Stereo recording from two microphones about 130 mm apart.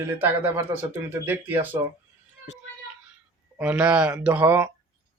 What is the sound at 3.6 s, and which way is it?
Speech, 10° right (ahead or behind).